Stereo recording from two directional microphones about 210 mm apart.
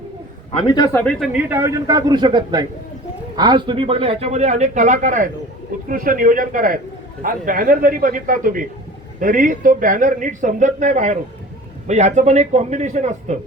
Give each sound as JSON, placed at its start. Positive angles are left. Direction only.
{"t": 0.5, "sound": "a man's voice", "side_deg": 20}
{"t": 1.2, "sound": "a man's voice", "side_deg": -5}